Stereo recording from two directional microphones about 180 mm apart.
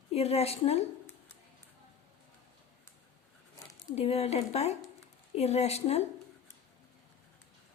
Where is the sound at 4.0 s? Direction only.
35° left (ahead or behind).